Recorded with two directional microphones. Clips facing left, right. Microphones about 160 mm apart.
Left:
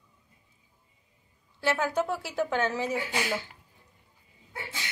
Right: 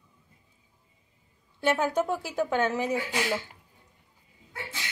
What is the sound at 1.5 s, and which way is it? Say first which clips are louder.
A woman's voice: right 2 dB; 20° right (ahead or behind).